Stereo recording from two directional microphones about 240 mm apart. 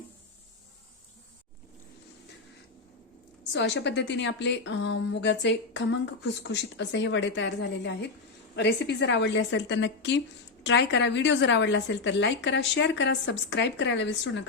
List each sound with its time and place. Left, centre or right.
3.5 s speech: left